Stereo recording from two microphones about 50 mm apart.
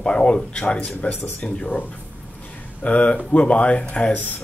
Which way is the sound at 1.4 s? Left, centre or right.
Centre.